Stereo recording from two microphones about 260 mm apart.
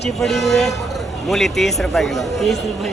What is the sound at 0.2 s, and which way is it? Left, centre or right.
Speech, centre.